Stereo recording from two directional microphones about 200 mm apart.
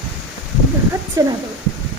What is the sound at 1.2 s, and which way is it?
Speech, 15° right (ahead or behind).